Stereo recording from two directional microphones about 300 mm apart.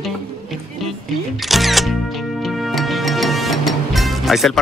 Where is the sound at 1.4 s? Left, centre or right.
Centre.